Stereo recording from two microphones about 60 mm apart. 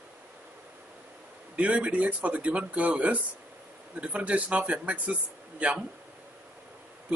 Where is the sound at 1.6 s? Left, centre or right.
Right.